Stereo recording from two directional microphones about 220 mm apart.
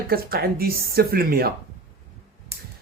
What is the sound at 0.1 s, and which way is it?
Speech, 45° right (ahead or behind).